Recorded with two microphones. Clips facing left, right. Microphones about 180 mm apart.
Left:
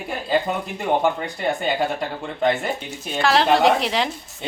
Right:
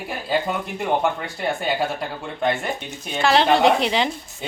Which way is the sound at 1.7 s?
5° right (ahead or behind).